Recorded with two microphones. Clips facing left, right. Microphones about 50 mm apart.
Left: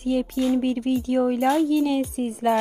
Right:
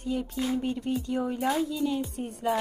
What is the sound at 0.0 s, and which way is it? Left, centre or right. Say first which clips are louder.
Speech: left 7 dB; left.